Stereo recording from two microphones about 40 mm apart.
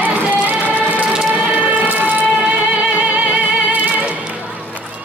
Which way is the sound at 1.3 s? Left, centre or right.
Right.